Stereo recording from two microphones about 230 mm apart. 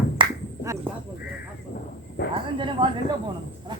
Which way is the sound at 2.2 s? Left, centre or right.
Left.